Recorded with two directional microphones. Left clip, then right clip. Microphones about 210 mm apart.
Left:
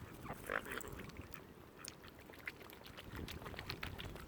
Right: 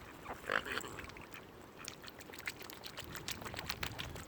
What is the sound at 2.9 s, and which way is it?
Duck, 45° right (ahead or behind).